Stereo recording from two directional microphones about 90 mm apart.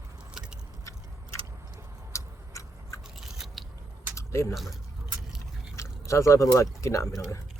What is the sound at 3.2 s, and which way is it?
Scissors, 5° right (ahead or behind).